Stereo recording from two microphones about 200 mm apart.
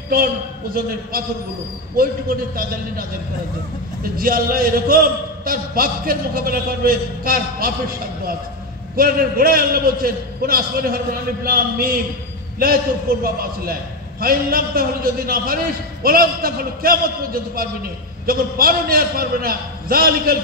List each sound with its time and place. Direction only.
0.7 s a man's voice: 50° right (ahead or behind)
4.2 s a man's voice: 45° right (ahead or behind)
8.9 s a man's voice: 45° right (ahead or behind)